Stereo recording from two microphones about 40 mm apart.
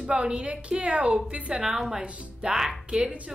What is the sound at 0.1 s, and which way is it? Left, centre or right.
Speech, right.